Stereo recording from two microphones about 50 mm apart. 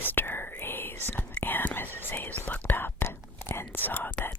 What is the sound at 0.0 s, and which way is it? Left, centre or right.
Whispering, left.